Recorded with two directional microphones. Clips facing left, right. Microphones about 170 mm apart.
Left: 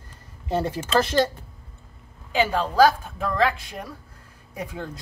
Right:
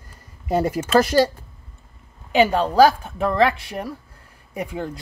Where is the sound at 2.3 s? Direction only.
15° right (ahead or behind).